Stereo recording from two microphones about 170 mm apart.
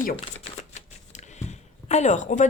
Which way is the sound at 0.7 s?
45° left (ahead or behind).